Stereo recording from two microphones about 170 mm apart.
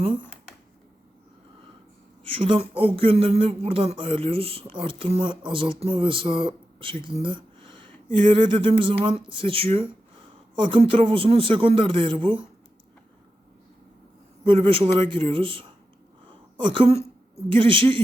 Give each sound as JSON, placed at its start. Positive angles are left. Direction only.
{"t": 2.2, "sound": "a man's voice", "side_deg": -35}
{"t": 14.4, "sound": "speech", "side_deg": -30}